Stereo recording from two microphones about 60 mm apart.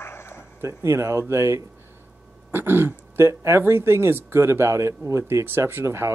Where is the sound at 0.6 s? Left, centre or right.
Right.